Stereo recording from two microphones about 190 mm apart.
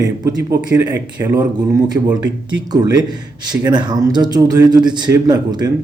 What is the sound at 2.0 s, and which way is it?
A man's voice, 25° right (ahead or behind).